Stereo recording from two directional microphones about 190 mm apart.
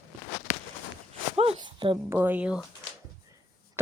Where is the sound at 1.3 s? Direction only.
30° right (ahead or behind).